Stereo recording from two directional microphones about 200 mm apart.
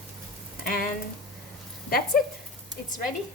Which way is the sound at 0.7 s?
45° left (ahead or behind).